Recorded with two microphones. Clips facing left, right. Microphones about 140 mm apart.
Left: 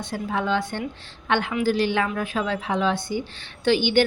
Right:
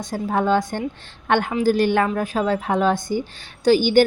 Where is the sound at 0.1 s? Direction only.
45° right (ahead or behind).